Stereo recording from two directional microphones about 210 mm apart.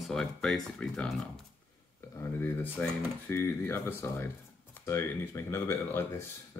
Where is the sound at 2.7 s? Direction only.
10° left (ahead or behind).